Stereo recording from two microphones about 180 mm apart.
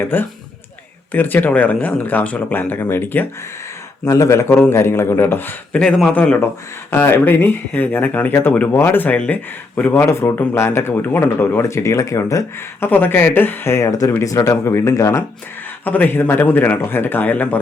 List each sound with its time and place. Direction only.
0.0 s speech: 10° left (ahead or behind)